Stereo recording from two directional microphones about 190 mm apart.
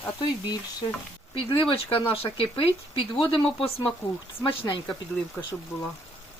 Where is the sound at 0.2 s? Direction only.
20° left (ahead or behind).